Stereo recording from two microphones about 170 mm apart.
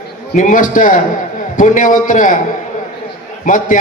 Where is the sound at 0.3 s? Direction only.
50° left (ahead or behind).